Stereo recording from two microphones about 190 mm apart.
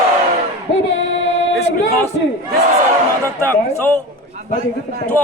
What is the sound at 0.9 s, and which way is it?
Female singing, 75° left (ahead or behind).